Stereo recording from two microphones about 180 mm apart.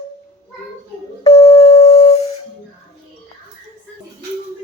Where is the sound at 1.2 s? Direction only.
35° left (ahead or behind).